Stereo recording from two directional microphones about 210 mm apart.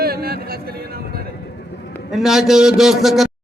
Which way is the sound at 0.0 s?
45° right (ahead or behind).